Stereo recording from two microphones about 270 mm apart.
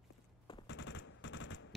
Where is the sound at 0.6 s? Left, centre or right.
Left.